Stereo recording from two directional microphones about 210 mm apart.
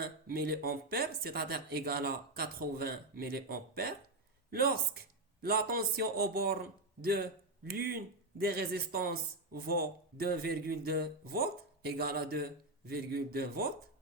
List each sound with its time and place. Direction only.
0.0 s a man's voice: 45° right (ahead or behind)